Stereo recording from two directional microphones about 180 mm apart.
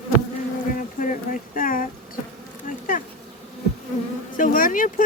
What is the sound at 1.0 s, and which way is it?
Speech, 50° left (ahead or behind).